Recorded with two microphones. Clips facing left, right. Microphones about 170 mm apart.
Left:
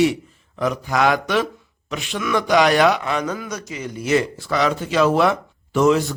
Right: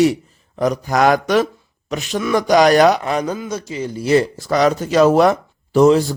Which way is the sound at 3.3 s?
25° right (ahead or behind).